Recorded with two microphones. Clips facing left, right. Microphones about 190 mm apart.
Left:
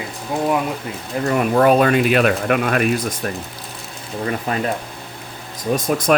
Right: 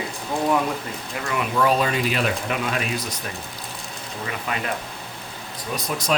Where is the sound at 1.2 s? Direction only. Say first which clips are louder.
Left 7 dB; 45° left (ahead or behind).